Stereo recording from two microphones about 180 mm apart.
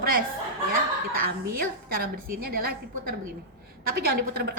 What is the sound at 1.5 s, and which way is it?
A woman's voice, 55° right (ahead or behind).